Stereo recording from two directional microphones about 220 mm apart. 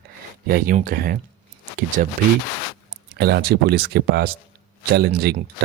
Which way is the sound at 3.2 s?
45° right (ahead or behind).